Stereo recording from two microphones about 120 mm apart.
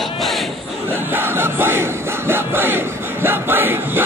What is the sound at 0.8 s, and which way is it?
Crowd, 15° right (ahead or behind).